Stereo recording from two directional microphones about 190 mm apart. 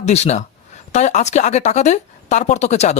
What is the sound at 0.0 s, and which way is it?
Speech, 35° left (ahead or behind).